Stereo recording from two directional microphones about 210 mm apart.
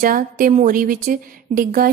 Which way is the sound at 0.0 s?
40° right (ahead or behind).